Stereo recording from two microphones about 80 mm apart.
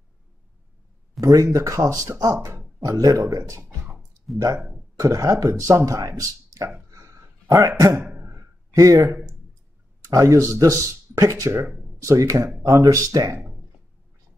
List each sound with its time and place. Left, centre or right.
1.2 s speech: right
3.6 s a sound: right
4.6 s speech: centre
4.9 s speech: right
6.9 s a sound: right
8.7 s speech: right